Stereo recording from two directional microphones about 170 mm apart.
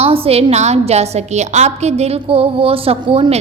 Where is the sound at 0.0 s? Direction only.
35° right (ahead or behind).